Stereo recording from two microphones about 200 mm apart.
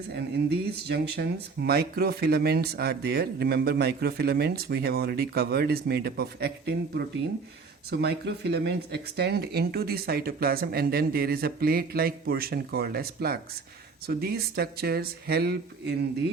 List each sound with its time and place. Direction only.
0.9 s speech: 55° right (ahead or behind)